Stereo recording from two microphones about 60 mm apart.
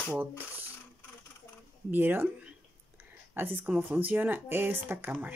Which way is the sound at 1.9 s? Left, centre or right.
Right.